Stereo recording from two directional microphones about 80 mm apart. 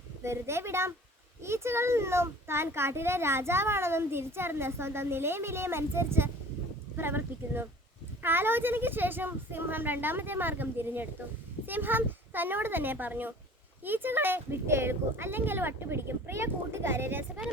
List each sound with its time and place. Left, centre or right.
0.2 s a child's voice: right